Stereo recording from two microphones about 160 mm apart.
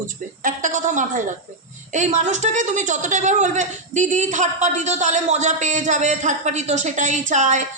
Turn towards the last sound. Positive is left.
turn(degrees=-50)  # may be behind; listen again after turning